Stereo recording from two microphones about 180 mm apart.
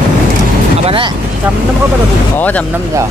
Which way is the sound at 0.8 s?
30° right (ahead or behind).